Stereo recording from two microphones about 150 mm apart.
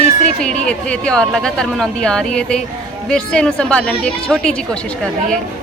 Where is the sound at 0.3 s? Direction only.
5° left (ahead or behind).